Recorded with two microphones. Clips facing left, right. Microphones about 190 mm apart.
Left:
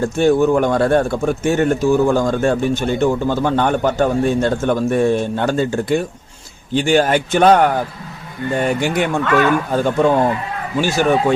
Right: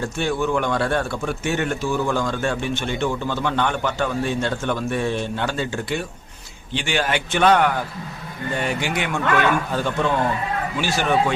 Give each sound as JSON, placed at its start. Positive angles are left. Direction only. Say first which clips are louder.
{"t": 0.2, "sound": "a man's voice", "louder": "left 9 dB", "side_deg": 45}